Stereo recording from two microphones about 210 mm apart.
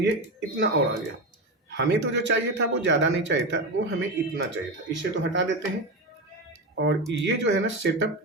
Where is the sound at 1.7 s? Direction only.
55° right (ahead or behind).